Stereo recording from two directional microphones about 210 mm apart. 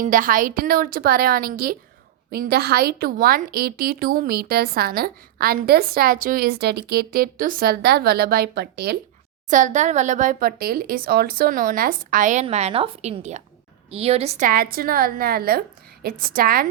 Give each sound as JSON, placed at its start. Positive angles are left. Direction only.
{"t": 0.0, "sound": "a woman's voice", "side_deg": -40}
{"t": 9.5, "sound": "a woman's voice", "side_deg": -35}